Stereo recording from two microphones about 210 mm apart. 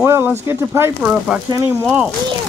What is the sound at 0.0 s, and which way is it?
Speech, 10° right (ahead or behind).